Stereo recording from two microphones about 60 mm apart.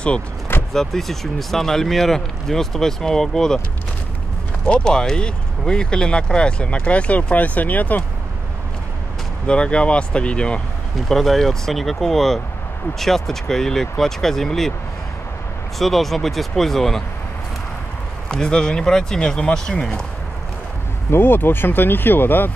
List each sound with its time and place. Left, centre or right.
0.7 s speech: centre
4.6 s speech: centre
9.5 s speech: centre
11.1 s speech: centre
15.8 s speech: centre
18.3 s speech: centre
21.1 s speech: left